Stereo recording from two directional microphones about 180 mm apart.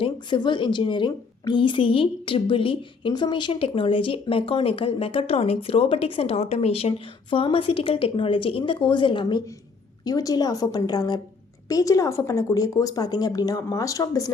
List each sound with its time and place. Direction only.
0.0 s a woman's voice: 25° left (ahead or behind)